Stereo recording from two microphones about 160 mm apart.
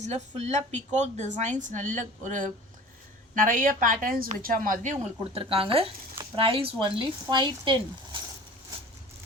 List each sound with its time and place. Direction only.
0.0 s a woman's voice: 45° right (ahead or behind)
5.4 s a woman's voice: 35° right (ahead or behind)